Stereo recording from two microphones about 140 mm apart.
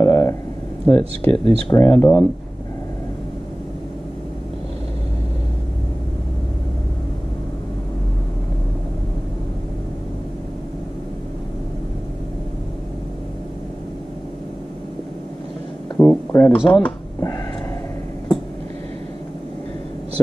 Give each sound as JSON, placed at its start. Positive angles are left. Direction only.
{"t": 0.0, "sound": "a sound", "side_deg": 20}
{"t": 0.8, "sound": "speech", "side_deg": 10}
{"t": 1.3, "sound": "speech", "side_deg": -40}
{"t": 1.8, "sound": "speech", "side_deg": 15}
{"t": 16.0, "sound": "a sound", "side_deg": 15}
{"t": 16.5, "sound": "speech", "side_deg": 5}